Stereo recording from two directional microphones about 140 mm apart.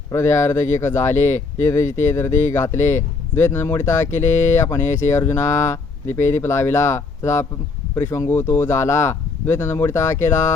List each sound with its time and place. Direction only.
0.1 s speech: 20° left (ahead or behind)